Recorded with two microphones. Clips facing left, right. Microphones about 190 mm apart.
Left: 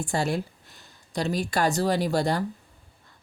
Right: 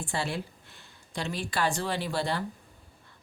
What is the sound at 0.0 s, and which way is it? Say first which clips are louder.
Speech: left 6 dB; 45° left (ahead or behind).